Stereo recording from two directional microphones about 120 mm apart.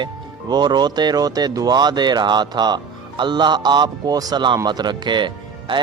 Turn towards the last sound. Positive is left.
turn(degrees=-40)  # may be behind; listen again after turning